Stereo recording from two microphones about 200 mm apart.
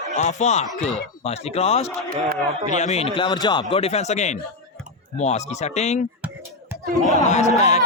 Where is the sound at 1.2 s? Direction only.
30° left (ahead or behind).